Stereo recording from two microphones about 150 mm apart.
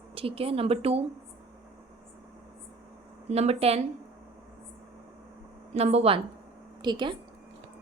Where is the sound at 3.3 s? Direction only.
45° right (ahead or behind).